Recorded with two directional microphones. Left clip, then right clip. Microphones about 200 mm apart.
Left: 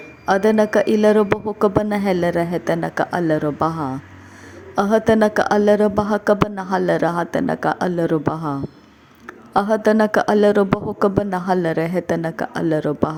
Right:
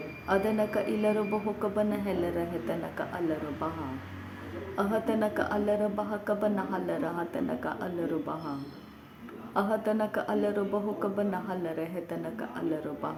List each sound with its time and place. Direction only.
0.3 s a woman's voice: 45° left (ahead or behind)
4.7 s a woman's voice: 45° left (ahead or behind)
9.5 s a woman's voice: 45° left (ahead or behind)